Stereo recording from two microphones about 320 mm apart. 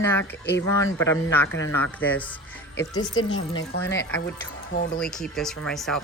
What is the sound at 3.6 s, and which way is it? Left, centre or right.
Speech, left.